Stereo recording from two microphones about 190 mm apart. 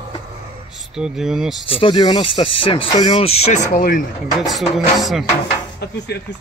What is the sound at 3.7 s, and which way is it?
Speech, 50° left (ahead or behind).